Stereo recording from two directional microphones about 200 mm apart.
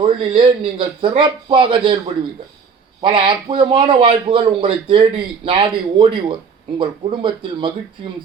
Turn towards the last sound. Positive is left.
turn(degrees=-25)  # may be behind; listen again after turning